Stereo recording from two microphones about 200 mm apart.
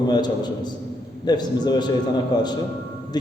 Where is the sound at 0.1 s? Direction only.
20° left (ahead or behind).